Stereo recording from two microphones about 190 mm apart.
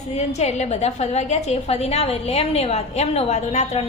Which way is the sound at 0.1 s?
35° left (ahead or behind).